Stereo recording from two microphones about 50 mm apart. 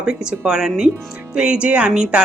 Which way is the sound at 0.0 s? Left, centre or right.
Centre.